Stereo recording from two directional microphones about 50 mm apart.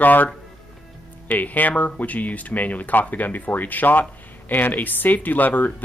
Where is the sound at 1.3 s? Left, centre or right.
Left.